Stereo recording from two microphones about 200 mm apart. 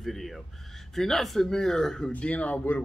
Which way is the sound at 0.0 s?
Centre (ahead or behind).